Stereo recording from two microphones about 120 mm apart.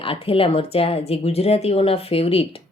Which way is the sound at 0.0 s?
50° left (ahead or behind).